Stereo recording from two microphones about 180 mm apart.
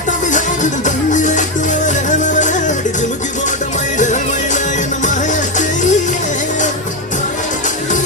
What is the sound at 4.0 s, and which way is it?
Music, 45° left (ahead or behind).